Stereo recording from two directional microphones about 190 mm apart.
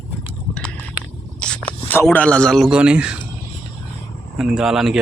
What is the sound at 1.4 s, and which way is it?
Speech, 5° left (ahead or behind).